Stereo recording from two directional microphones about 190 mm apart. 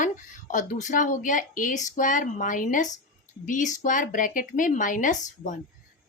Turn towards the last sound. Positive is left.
turn(degrees=40)  # may be behind; listen again after turning